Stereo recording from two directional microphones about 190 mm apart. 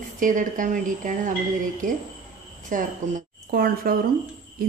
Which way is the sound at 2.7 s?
45° right (ahead or behind).